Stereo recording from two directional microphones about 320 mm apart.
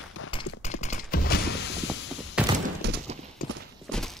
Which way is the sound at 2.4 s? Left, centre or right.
Centre.